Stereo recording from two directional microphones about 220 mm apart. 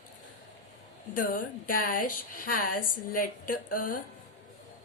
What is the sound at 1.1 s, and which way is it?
A woman's voice, 40° left (ahead or behind).